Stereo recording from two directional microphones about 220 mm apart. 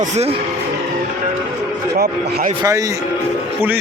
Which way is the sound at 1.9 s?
45° right (ahead or behind).